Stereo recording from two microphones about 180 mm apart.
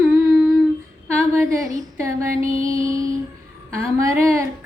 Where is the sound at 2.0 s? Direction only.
15° right (ahead or behind).